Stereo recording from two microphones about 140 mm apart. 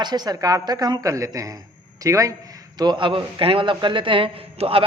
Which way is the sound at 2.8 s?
35° right (ahead or behind).